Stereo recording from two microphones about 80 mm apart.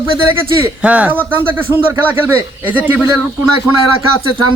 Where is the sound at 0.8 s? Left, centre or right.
Centre.